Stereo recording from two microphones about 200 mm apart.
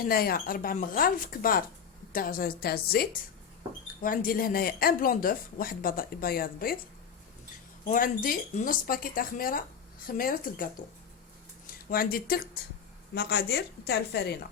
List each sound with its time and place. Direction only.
0.0 s speech: 50° left (ahead or behind)
7.9 s speech: 40° left (ahead or behind)